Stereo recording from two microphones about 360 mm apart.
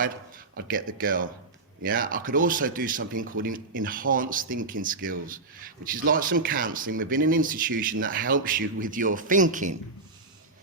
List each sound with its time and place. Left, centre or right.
0.5 s speech: right